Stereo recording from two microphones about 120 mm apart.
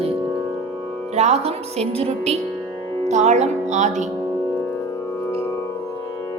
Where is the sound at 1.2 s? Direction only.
60° right (ahead or behind).